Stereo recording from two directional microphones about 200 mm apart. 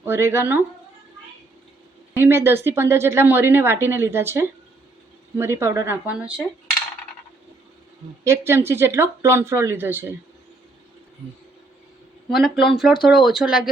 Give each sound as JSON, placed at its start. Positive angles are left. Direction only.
{"t": 0.0, "sound": "speech", "side_deg": -10}
{"t": 2.1, "sound": "speech", "side_deg": -10}
{"t": 8.2, "sound": "speech", "side_deg": -15}
{"t": 12.3, "sound": "speech", "side_deg": 0}